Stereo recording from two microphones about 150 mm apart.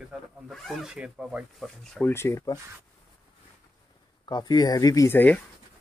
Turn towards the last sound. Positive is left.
turn(degrees=15)  # may be behind; listen again after turning